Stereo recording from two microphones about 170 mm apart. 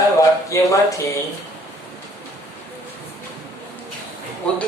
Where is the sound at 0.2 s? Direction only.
20° left (ahead or behind).